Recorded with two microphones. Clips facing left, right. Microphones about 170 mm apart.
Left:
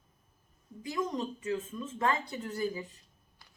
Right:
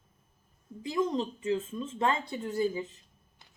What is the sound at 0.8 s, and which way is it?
A woman's voice, 25° right (ahead or behind).